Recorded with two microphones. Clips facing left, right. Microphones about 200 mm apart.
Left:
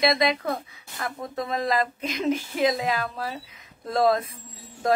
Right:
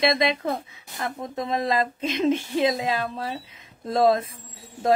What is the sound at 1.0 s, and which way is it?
A woman's voice, 20° right (ahead or behind).